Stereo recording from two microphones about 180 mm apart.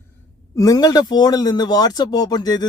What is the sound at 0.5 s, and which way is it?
Speech, 20° left (ahead or behind).